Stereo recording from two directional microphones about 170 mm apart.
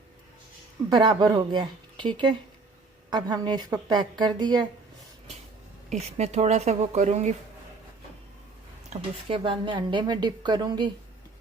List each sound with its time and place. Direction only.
0.9 s a woman's voice: 25° right (ahead or behind)
5.9 s speech: 40° right (ahead or behind)
8.9 s a woman's voice: 35° right (ahead or behind)